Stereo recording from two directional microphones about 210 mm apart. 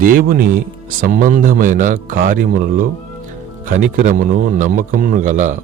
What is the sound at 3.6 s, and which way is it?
Speech, 40° right (ahead or behind).